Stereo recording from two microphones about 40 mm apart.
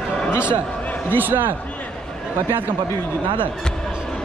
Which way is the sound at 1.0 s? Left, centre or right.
Right.